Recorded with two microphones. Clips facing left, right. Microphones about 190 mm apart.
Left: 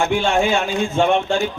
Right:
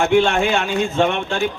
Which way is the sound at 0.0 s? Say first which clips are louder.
Right 2 dB; 60° right (ahead or behind).